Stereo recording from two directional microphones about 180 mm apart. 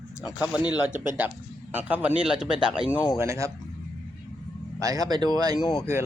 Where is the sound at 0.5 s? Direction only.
5° right (ahead or behind).